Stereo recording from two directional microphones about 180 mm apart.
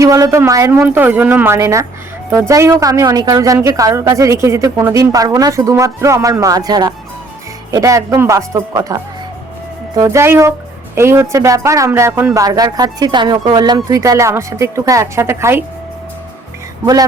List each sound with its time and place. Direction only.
0.0 s speech: 15° right (ahead or behind)